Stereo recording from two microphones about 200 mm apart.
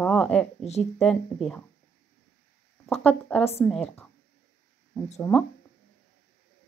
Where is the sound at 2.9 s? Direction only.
5° left (ahead or behind).